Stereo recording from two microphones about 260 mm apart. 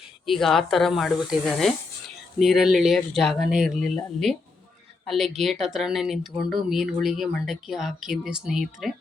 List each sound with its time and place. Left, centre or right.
0.3 s speech: centre